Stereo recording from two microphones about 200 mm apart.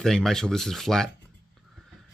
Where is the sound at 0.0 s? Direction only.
Centre (ahead or behind).